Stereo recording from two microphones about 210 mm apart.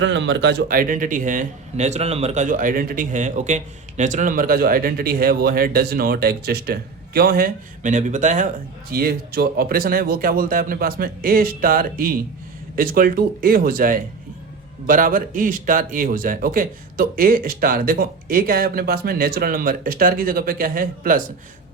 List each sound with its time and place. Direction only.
0.0 s a man's voice: 60° right (ahead or behind); by 21.2 s 40° right (ahead or behind)